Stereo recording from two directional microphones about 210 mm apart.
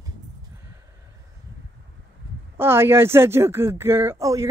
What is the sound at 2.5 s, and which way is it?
Speech, 10° right (ahead or behind).